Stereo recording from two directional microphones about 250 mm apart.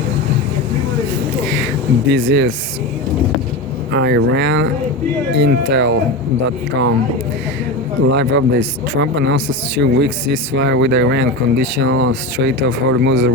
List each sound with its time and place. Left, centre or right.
2.0 s speech: right
3.9 s speech: right
8.1 s speech: right